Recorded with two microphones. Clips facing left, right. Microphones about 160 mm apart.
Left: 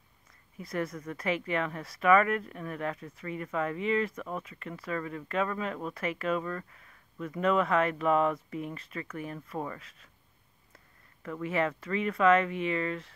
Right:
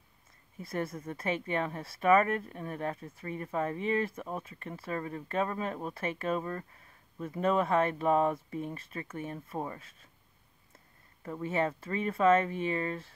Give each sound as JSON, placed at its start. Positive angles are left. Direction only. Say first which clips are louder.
{"t": 0.6, "sound": "speech", "louder": "left 1 dB", "side_deg": -30}
{"t": 11.2, "sound": "speech", "louder": "left 1 dB", "side_deg": -30}